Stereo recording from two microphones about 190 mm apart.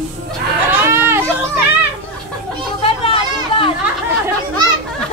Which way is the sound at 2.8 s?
30° left (ahead or behind).